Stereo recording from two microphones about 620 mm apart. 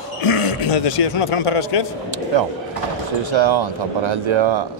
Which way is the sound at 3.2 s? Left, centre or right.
Right.